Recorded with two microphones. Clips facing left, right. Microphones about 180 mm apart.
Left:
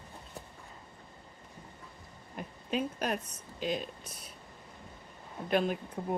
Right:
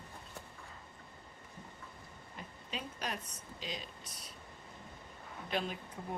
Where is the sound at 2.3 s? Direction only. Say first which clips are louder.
Left 11 dB; 55° left (ahead or behind).